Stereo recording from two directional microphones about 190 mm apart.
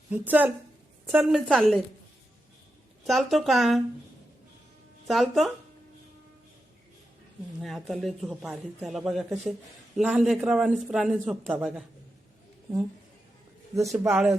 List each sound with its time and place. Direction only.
0.1 s a woman's voice: 10° right (ahead or behind)
3.1 s a man's voice: centre (ahead or behind)
5.0 s a man's voice: centre (ahead or behind)
7.6 s a man's voice: centre (ahead or behind)
13.7 s a woman's voice: 15° right (ahead or behind)